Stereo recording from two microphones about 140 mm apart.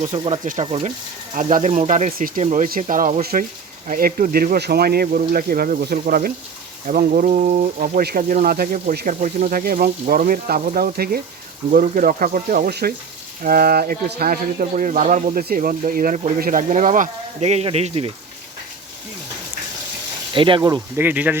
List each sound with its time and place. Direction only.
0.0 s speech: 50° right (ahead or behind)
1.4 s speech: 60° right (ahead or behind)
2.1 s speech: 80° right
2.4 s speech: 65° right (ahead or behind)
2.8 s speech: 65° right (ahead or behind); by 6.3 s 90° right
6.8 s speech: 75° right (ahead or behind); by 18.1 s 45° right (ahead or behind)
20.3 s speech: 35° right (ahead or behind)
20.6 s speech: 25° right (ahead or behind)
21.0 s speech: 10° right (ahead or behind)